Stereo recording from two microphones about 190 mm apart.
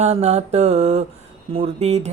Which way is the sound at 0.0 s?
35° right (ahead or behind).